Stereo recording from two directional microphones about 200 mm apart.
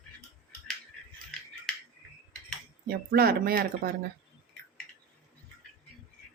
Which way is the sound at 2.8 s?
50° right (ahead or behind).